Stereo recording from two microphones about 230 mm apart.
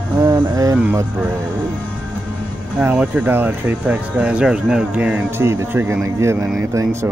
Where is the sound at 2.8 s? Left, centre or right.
Centre.